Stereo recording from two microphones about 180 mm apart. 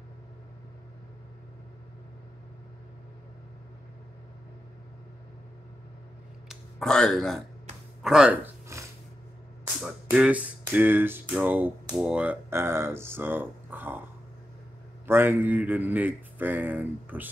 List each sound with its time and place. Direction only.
6.5 s a sound: 5° left (ahead or behind)
8.0 s speech: 5° right (ahead or behind)
8.7 s snort: 15° right (ahead or behind)
9.8 s a man's voice: 10° right (ahead or behind)
15.0 s a man's voice: 10° right (ahead or behind)